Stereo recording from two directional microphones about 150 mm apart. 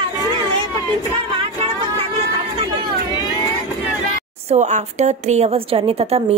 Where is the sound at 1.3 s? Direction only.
40° right (ahead or behind).